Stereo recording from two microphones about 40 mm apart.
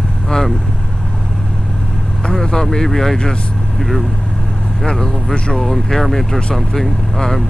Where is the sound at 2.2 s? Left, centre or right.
Centre.